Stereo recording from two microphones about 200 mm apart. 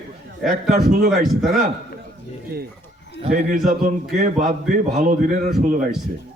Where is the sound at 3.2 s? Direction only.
30° right (ahead or behind).